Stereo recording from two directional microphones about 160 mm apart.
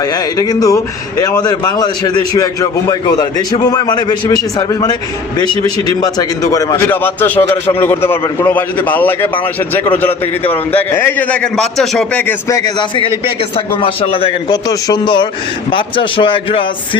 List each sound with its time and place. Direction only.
0.0 s a man's voice: 25° left (ahead or behind)
6.0 s a man's voice: 25° left (ahead or behind)
13.8 s speech: 35° left (ahead or behind)
14.7 s a man's voice: 25° left (ahead or behind)